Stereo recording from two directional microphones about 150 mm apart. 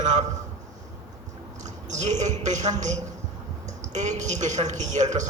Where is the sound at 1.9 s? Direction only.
50° right (ahead or behind).